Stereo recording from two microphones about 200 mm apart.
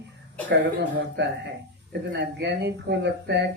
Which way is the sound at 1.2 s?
60° right (ahead or behind).